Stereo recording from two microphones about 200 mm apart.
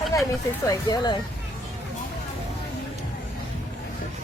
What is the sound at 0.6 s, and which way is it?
Speech, 20° left (ahead or behind).